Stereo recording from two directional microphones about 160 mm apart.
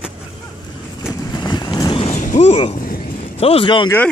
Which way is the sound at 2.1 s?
50° left (ahead or behind).